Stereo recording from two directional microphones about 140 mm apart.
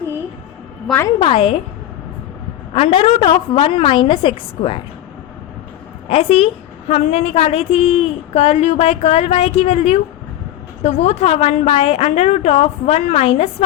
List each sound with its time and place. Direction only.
1.2 s a woman's voice: 40° left (ahead or behind)
2.7 s a woman's voice: 45° left (ahead or behind)
6.1 s a woman's voice: 45° left (ahead or behind)